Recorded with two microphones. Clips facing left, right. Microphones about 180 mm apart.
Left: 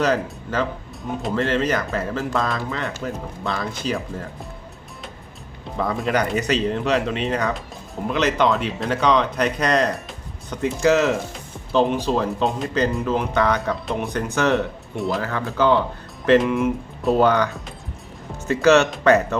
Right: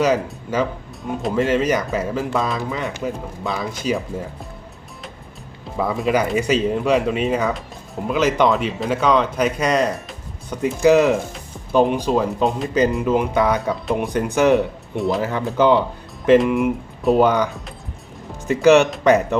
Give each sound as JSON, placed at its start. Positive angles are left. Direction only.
{"t": 0.0, "sound": "speech", "side_deg": -10}
{"t": 5.7, "sound": "speech", "side_deg": -5}
{"t": 14.9, "sound": "speech", "side_deg": 0}
{"t": 15.2, "sound": "speech", "side_deg": -15}